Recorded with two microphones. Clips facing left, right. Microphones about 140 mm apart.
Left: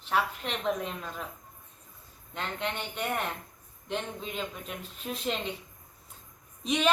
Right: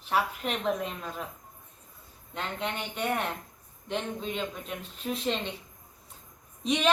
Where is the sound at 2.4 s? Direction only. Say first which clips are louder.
Right 1 dB; centre (ahead or behind).